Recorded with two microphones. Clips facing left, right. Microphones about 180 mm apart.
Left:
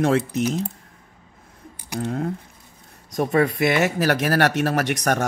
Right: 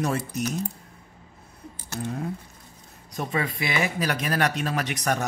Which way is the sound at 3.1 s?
50° left (ahead or behind).